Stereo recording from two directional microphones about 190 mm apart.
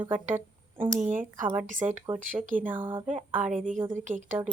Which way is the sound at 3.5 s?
40° right (ahead or behind).